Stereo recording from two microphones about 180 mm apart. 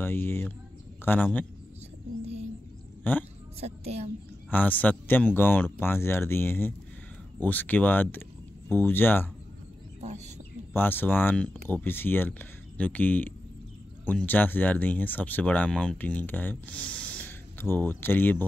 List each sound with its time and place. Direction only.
0.0 s speech: 10° left (ahead or behind)
3.0 s speech: 10° left (ahead or behind)
3.6 s a woman's voice: 35° right (ahead or behind)
4.5 s speech: 10° left (ahead or behind)
9.9 s bird: 40° right (ahead or behind)
10.7 s speech: 10° left (ahead or behind)